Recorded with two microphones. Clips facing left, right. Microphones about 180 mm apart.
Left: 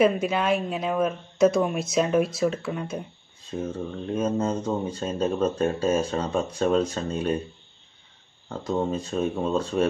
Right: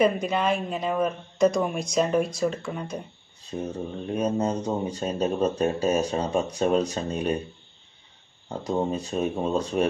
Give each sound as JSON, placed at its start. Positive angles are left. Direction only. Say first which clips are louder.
{"t": 0.0, "sound": "speech", "louder": "left 1 dB", "side_deg": 5}
{"t": 3.4, "sound": "speech", "louder": "left 1 dB", "side_deg": -15}
{"t": 8.7, "sound": "speech", "louder": "even", "side_deg": -10}